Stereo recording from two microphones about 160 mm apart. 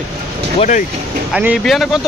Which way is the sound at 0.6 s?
50° left (ahead or behind).